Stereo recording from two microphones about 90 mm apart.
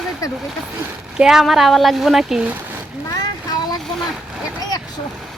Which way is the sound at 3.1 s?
45° left (ahead or behind).